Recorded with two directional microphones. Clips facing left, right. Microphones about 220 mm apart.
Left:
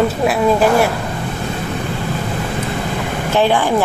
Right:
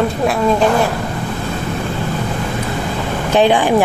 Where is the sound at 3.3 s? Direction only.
15° right (ahead or behind).